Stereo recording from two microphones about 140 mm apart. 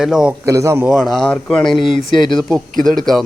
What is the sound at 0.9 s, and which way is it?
A man's voice, centre (ahead or behind).